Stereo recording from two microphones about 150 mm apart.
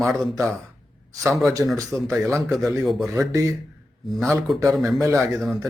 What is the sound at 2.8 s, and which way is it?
Speech, centre (ahead or behind).